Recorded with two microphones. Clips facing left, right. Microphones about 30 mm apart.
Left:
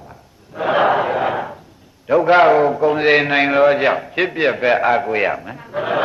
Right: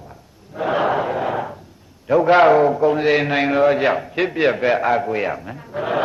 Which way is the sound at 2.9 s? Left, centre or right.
Left.